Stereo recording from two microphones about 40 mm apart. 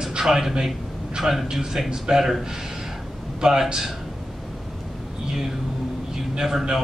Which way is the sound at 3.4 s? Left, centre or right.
Centre.